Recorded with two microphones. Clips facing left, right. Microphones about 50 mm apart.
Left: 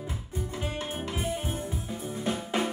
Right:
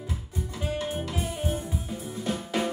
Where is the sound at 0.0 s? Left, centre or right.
Left.